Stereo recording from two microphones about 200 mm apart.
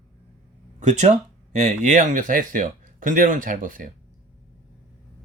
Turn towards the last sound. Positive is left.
turn(degrees=-40)  # may be behind; listen again after turning